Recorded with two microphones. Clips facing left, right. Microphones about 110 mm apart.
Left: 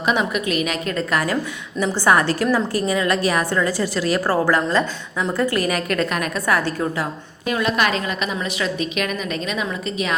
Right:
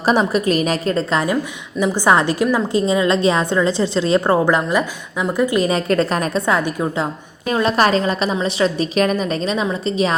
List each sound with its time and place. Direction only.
0.0 s a woman's voice: 35° right (ahead or behind)